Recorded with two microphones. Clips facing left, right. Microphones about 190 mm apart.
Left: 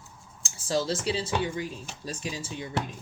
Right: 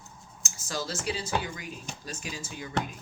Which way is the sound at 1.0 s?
30° left (ahead or behind).